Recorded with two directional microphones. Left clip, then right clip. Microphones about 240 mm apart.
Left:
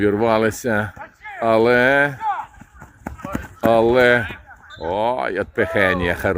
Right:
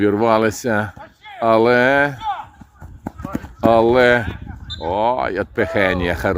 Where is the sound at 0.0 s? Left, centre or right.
Centre.